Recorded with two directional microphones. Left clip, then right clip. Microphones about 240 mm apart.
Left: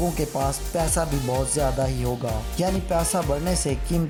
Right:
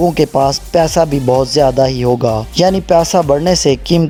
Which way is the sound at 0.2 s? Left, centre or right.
Right.